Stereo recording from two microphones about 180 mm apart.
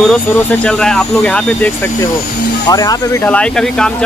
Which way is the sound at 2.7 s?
20° left (ahead or behind).